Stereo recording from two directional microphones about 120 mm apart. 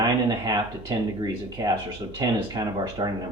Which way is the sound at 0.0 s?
35° right (ahead or behind).